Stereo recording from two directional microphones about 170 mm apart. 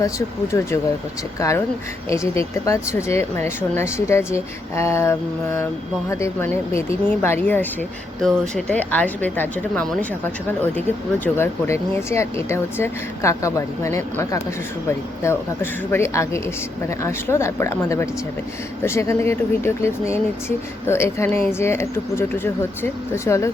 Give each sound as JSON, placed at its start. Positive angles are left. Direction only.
{"t": 0.0, "sound": "speech", "side_deg": 15}
{"t": 11.3, "sound": "speech", "side_deg": 15}